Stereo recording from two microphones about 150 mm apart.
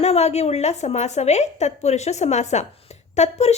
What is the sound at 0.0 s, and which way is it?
A woman's voice, 45° left (ahead or behind).